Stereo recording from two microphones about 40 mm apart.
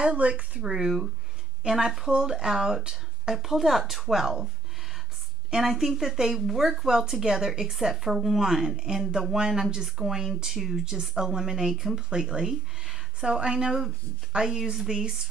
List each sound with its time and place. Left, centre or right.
0.0 s speech: right
1.6 s speech: right
2.0 s speech: centre
3.3 s a woman's voice: centre
5.5 s speech: centre
12.4 s speech: centre
13.2 s speech: right